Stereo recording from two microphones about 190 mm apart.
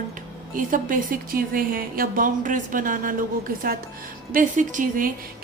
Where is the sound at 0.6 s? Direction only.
45° right (ahead or behind).